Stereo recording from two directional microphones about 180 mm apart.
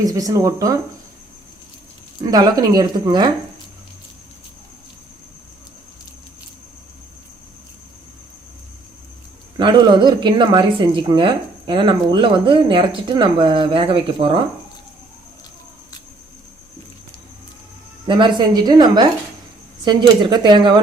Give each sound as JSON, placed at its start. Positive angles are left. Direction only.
{"t": 0.0, "sound": "speech", "side_deg": -20}
{"t": 2.2, "sound": "speech", "side_deg": -20}
{"t": 9.6, "sound": "speech", "side_deg": -25}
{"t": 18.0, "sound": "speech", "side_deg": -25}